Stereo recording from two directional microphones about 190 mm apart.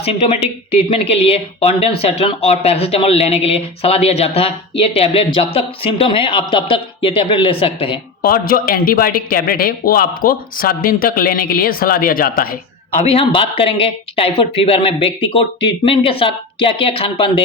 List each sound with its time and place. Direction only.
0.0 s speech: 35° left (ahead or behind)
8.2 s speech: 50° left (ahead or behind)
13.0 s speech: 30° left (ahead or behind)